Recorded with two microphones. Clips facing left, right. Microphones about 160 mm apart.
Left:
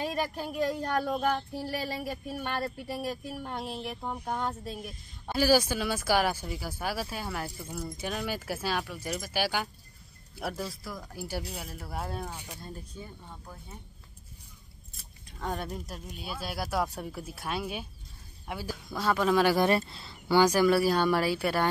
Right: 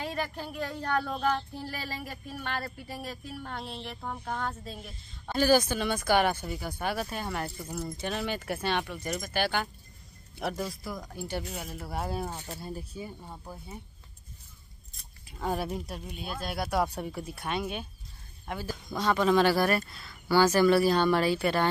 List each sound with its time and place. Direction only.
0.4 s speech: 10° left (ahead or behind); by 13.7 s 15° right (ahead or behind)
15.0 s speech: 5° right (ahead or behind)
19.5 s speech: 25° left (ahead or behind)
20.3 s speech: 10° left (ahead or behind)